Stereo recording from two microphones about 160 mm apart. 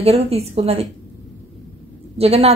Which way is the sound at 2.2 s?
40° right (ahead or behind).